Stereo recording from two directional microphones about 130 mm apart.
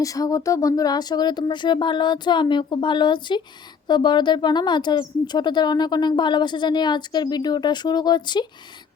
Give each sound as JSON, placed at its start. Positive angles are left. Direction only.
{"t": 0.0, "sound": "speech", "side_deg": 25}